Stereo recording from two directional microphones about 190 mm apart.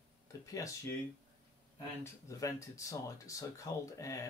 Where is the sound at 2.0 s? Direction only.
15° left (ahead or behind).